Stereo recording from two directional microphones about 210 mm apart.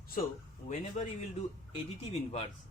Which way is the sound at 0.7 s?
35° left (ahead or behind).